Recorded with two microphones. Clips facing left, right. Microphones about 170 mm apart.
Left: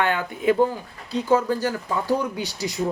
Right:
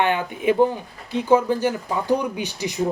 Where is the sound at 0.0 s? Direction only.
20° right (ahead or behind).